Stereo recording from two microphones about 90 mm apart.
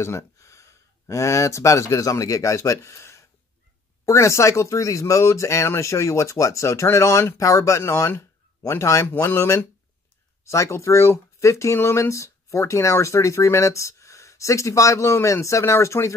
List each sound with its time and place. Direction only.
0.0 s speech: 35° left (ahead or behind)
8.1 s a sound: 30° left (ahead or behind)
9.0 s speech: 25° left (ahead or behind)